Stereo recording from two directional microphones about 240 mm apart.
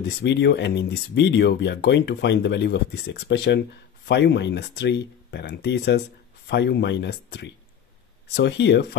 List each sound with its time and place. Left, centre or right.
0.2 s speech: left